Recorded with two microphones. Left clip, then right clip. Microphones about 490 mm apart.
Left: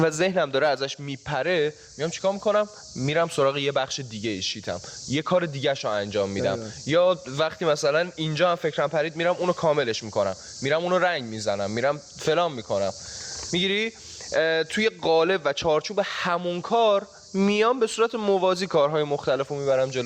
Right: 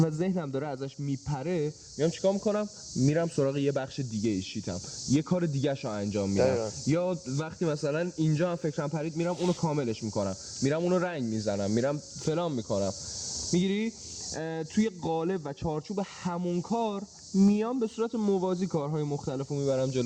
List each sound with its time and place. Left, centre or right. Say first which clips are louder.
0.0 s speech: left 9 dB; centre
0.8 s speech: left 6 dB; left
2.0 s speech: left 1 dB; left
13.5 s speech: left 7 dB; left
15.3 s speech: left 11 dB; centre
15.9 s speech: left 10 dB; left
17.4 s speech: left 8 dB; centre
17.8 s speech: left 7 dB; left
18.7 s speech: left 11 dB; centre
19.5 s speech: left 6 dB; left